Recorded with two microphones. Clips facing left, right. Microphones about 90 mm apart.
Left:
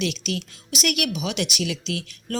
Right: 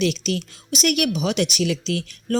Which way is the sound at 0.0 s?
40° right (ahead or behind).